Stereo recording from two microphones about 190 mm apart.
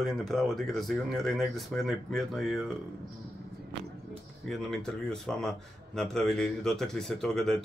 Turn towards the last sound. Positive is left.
turn(degrees=0)  # may be behind; listen again after turning